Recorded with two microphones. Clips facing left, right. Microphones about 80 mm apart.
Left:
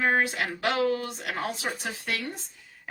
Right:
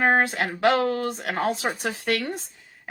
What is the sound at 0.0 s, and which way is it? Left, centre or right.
Speech, right.